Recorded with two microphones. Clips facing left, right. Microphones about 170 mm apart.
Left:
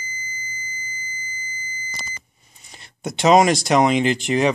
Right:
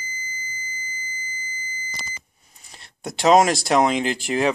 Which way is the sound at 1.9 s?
50° left (ahead or behind).